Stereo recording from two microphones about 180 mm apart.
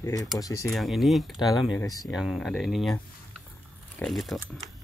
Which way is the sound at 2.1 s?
Centre (ahead or behind).